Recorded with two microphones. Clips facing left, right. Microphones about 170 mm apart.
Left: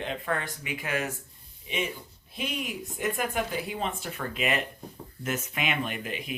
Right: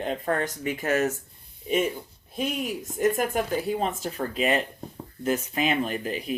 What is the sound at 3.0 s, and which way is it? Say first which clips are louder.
Speech: right 6 dB; 45° right (ahead or behind).